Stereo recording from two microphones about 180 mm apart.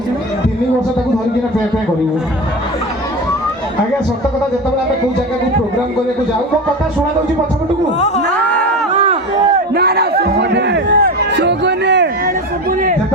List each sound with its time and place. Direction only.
7.9 s speech: 40° left (ahead or behind)
8.9 s a sound: 40° right (ahead or behind)
9.7 s music: 60° right (ahead or behind)